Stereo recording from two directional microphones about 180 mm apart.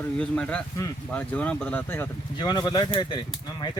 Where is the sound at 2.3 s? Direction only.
25° left (ahead or behind).